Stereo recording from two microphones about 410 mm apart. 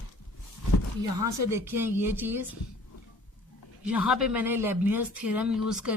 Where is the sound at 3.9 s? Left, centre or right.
Centre.